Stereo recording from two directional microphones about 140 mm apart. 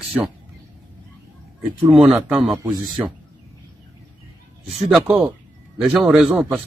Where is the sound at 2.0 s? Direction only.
10° right (ahead or behind).